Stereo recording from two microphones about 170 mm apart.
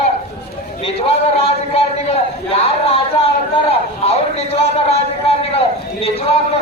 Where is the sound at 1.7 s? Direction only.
35° left (ahead or behind).